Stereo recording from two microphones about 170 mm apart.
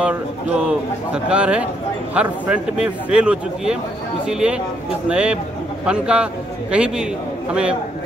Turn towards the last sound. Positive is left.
turn(degrees=-5)  # may be behind; listen again after turning